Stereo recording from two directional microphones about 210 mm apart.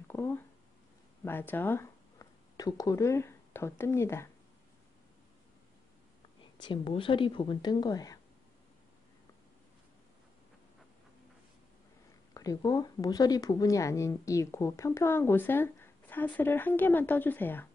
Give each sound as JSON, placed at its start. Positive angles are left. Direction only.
{"t": 0.1, "sound": "speech", "side_deg": 10}
{"t": 6.6, "sound": "speech", "side_deg": 20}
{"t": 12.4, "sound": "speech", "side_deg": 15}